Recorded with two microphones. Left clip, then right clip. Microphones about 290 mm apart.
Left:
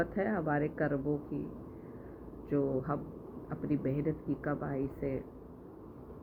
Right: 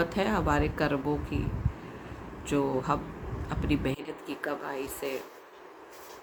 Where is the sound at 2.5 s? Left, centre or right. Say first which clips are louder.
Right 5 dB; centre.